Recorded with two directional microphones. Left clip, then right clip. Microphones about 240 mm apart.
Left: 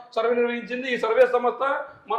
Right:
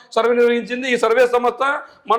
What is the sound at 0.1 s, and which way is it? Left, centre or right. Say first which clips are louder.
A man's voice: right 8 dB; right.